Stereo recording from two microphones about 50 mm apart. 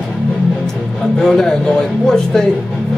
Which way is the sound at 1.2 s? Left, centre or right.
Centre.